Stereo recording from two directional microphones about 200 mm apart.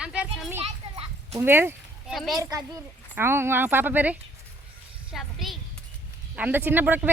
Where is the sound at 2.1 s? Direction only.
Centre (ahead or behind).